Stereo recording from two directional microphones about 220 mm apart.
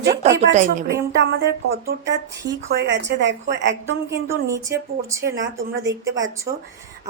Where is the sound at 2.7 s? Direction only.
50° right (ahead or behind).